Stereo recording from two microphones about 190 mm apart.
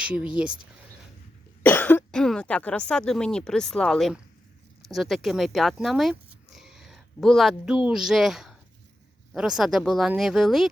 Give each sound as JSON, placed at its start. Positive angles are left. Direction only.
{"t": 0.0, "sound": "speech", "side_deg": -5}
{"t": 1.6, "sound": "speech", "side_deg": 10}